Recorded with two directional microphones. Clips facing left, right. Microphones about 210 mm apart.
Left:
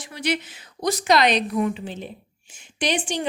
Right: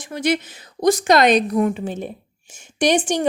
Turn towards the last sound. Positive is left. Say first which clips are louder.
# right 7 dB
turn(degrees=-45)  # may be behind; listen again after turning